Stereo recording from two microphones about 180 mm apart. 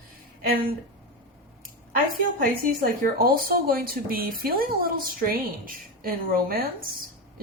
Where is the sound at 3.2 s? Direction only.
55° right (ahead or behind).